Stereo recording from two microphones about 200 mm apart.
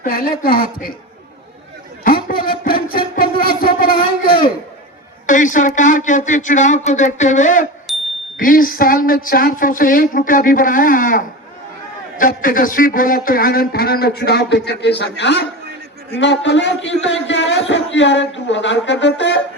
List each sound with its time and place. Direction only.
0.0 s speech: 45° left (ahead or behind)
2.0 s a sound: 45° left (ahead or behind)
5.2 s speech: 40° left (ahead or behind)
7.9 s ding: centre (ahead or behind)
8.4 s a man's voice: 45° left (ahead or behind); by 19.4 s 60° left (ahead or behind)